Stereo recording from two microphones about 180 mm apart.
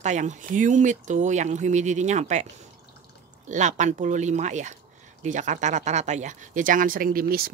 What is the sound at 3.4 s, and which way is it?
Speech, 45° right (ahead or behind).